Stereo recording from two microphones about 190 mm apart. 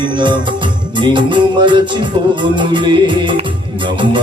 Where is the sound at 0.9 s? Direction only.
25° right (ahead or behind).